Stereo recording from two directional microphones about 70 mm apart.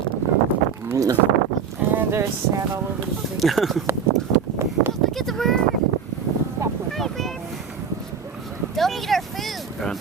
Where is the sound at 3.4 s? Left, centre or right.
Centre.